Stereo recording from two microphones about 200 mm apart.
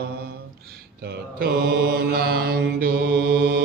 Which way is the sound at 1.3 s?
50° right (ahead or behind).